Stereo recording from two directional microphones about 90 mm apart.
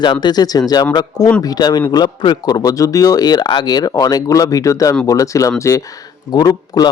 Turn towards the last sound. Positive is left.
turn(degrees=45)  # may be behind; listen again after turning